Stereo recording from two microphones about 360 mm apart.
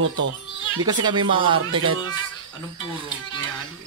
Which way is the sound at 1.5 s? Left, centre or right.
Right.